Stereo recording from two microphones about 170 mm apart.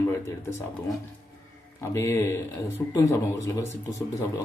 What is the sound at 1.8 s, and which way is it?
Speech, 15° left (ahead or behind).